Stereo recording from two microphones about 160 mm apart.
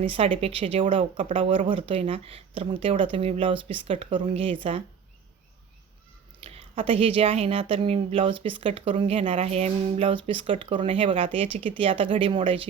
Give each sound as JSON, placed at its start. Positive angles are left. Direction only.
{"t": 0.0, "sound": "speech", "side_deg": -35}
{"t": 6.4, "sound": "speech", "side_deg": -35}